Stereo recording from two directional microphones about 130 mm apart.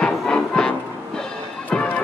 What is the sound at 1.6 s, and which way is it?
Music, 10° left (ahead or behind).